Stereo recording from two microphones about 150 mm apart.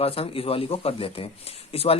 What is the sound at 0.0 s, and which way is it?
A man's voice, 40° left (ahead or behind).